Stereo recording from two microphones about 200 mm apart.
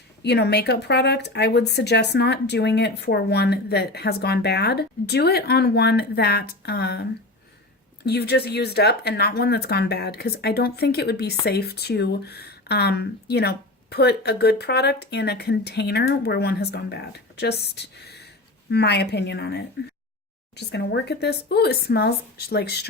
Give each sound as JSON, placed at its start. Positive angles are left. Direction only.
{"t": 0.2, "sound": "a woman's voice", "side_deg": 55}